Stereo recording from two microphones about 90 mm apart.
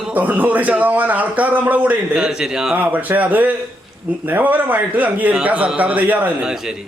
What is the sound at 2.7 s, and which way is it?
A man's voice, 20° right (ahead or behind).